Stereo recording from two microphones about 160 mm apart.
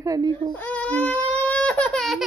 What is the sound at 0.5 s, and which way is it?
Baby cry, 10° left (ahead or behind).